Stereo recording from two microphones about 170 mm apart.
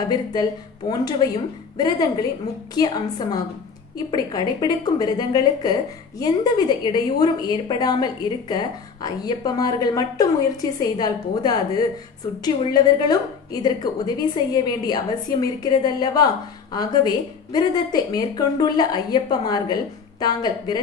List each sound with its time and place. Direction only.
0.1 s a woman's voice: 25° left (ahead or behind)
12.7 s a woman's voice: 20° left (ahead or behind)